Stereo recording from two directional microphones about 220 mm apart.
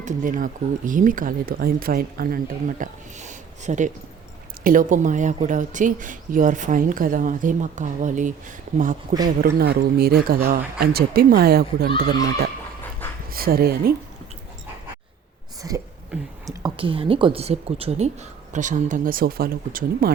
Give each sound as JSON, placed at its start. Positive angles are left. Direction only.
{"t": 0.0, "sound": "speech", "side_deg": -40}
{"t": 9.6, "sound": "speech", "side_deg": -45}
{"t": 13.3, "sound": "speech", "side_deg": -45}
{"t": 15.6, "sound": "a woman's voice", "side_deg": -15}